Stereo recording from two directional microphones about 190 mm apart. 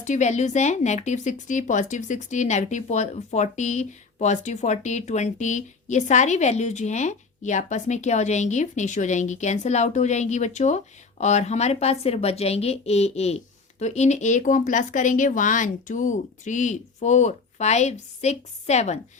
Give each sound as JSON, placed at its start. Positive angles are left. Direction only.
{"t": 0.0, "sound": "speech", "side_deg": 40}